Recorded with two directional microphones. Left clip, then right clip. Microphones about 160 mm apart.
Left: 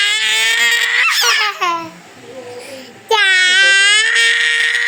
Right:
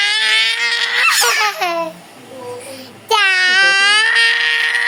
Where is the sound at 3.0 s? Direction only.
50° right (ahead or behind).